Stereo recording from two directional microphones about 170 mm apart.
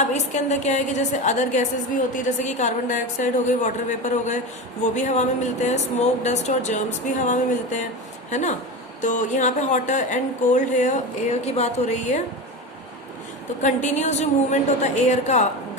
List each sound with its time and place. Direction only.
0.0 s speech: 45° left (ahead or behind)
13.6 s speech: 45° left (ahead or behind)